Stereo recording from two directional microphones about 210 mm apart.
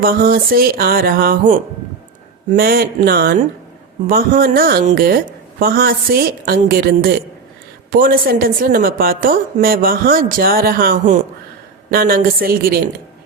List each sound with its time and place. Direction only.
0.0 s a woman's voice: 45° right (ahead or behind)